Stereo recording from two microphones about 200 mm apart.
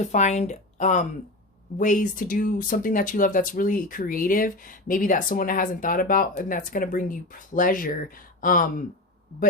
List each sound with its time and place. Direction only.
0.0 s speech: 35° left (ahead or behind)